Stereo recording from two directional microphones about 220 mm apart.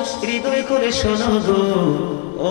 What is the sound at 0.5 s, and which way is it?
Speech, 15° left (ahead or behind).